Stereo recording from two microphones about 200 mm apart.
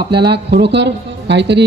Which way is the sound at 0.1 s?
55° right (ahead or behind).